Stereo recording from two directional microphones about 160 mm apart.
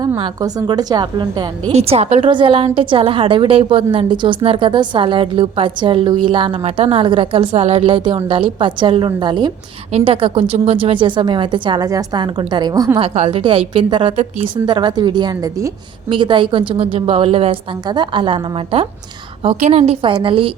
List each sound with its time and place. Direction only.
0.2 s a woman's voice: 25° right (ahead or behind)
1.7 s a woman's voice: 40° right (ahead or behind); by 13.0 s 25° right (ahead or behind)
13.0 s a woman's voice: 40° right (ahead or behind)